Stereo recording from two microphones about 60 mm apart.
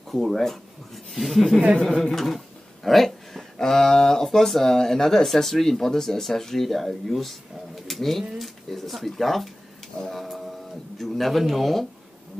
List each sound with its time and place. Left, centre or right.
0.1 s speech: centre
10.2 s a sound: centre
11.0 s speech: centre